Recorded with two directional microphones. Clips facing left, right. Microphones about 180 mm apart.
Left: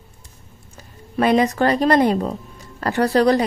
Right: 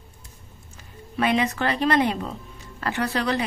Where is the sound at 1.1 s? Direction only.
40° left (ahead or behind).